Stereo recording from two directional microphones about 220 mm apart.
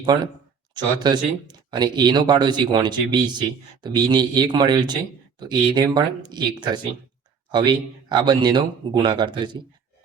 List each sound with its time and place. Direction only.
0.7 s speech: 20° right (ahead or behind)